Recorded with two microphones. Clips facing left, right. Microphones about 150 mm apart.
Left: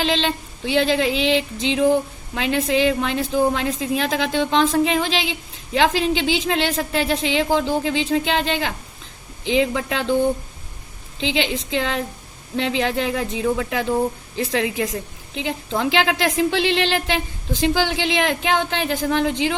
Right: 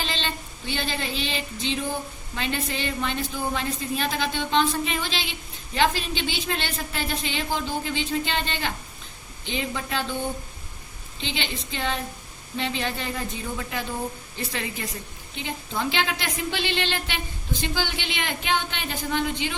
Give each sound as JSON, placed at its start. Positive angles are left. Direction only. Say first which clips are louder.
{"t": 0.0, "sound": "a woman's voice", "louder": "left 9 dB", "side_deg": 90}
{"t": 11.2, "sound": "a woman's voice", "louder": "left 9 dB", "side_deg": 90}